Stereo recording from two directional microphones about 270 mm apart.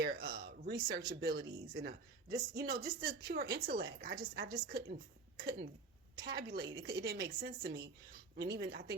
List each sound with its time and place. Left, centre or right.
0.0 s speech: right
6.1 s speech: right